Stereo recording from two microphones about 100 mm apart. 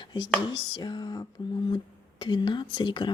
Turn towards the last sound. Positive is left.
turn(degrees=50)  # may be behind; listen again after turning